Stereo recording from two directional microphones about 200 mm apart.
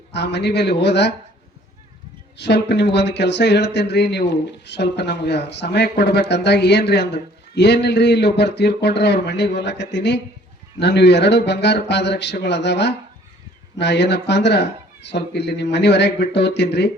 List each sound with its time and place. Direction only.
0.1 s speech: 60° left (ahead or behind)
2.4 s speech: 60° left (ahead or behind)